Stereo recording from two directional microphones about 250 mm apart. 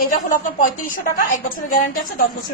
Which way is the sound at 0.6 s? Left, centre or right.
Left.